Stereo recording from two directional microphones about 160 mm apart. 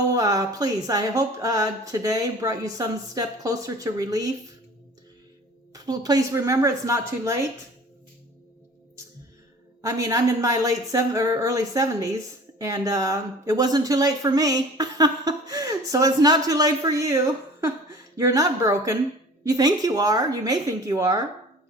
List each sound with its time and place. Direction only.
0.1 s speech: 20° right (ahead or behind)
5.7 s speech: 25° right (ahead or behind)
9.8 s speech: 20° right (ahead or behind)
18.2 s speech: 20° right (ahead or behind)